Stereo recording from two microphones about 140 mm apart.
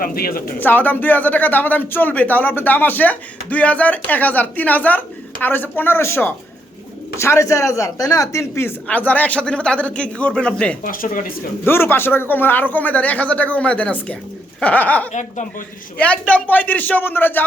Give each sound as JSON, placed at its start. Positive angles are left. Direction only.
{"t": 0.0, "sound": "speech", "side_deg": 90}
{"t": 0.6, "sound": "speech", "side_deg": 15}
{"t": 10.8, "sound": "speech", "side_deg": 85}
{"t": 11.6, "sound": "speech", "side_deg": 15}
{"t": 15.1, "sound": "a woman's voice", "side_deg": 60}
{"t": 16.0, "sound": "speech", "side_deg": 10}